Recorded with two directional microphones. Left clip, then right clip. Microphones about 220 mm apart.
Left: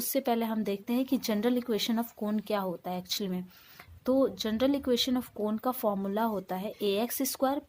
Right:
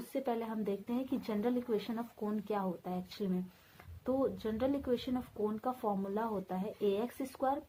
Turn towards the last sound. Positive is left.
turn(degrees=55)  # may be behind; listen again after turning